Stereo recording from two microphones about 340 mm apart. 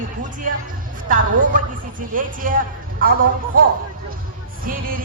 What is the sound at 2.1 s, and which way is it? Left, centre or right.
Speech, right.